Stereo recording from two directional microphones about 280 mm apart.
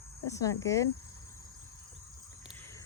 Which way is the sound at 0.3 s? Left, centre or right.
Centre.